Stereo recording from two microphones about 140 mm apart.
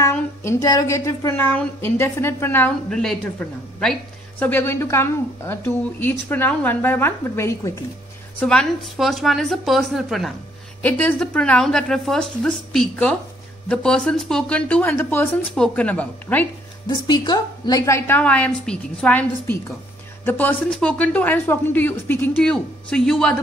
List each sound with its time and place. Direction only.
0.1 s speech: 20° left (ahead or behind)
8.4 s speech: 5° left (ahead or behind)
10.8 s speech: 10° left (ahead or behind)
16.8 s speech: 30° left (ahead or behind); by 23.3 s 5° left (ahead or behind)